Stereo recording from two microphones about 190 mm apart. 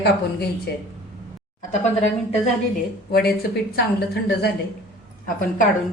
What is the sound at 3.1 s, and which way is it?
A woman's voice, 55° left (ahead or behind).